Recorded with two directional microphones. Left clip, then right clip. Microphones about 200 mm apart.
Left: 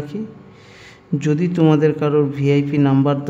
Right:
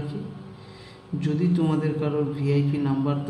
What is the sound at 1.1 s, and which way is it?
A man's voice, 55° left (ahead or behind).